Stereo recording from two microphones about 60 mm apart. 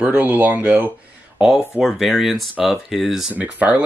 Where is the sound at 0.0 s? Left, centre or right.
Right.